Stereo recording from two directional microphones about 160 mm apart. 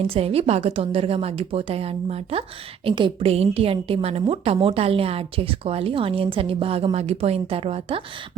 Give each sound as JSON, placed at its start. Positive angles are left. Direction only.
{"t": 0.0, "sound": "a woman's voice", "side_deg": -40}